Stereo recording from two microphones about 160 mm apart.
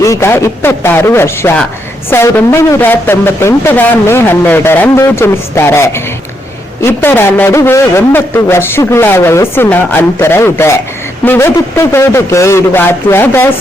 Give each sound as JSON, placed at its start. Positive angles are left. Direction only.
{"t": 0.0, "sound": "a man's voice", "side_deg": 20}
{"t": 6.8, "sound": "a man's voice", "side_deg": 15}